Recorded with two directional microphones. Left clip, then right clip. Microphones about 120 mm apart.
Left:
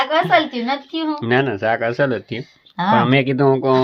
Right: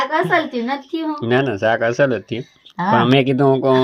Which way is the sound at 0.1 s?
15° left (ahead or behind).